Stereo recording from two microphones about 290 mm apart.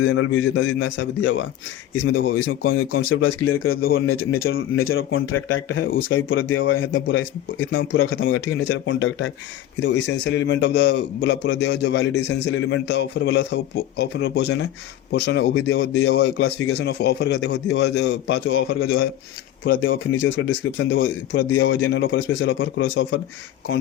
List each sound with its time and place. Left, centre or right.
0.0 s a man's voice: left
18.7 s a man's voice: left
19.8 s a man's voice: left